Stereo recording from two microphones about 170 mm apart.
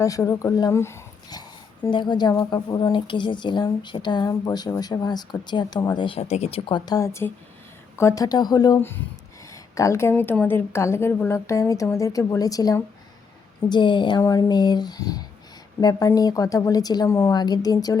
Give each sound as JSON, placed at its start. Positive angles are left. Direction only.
{"t": 0.0, "sound": "a woman's voice", "side_deg": 20}